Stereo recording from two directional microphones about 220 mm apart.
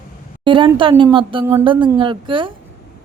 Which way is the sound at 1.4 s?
10° right (ahead or behind).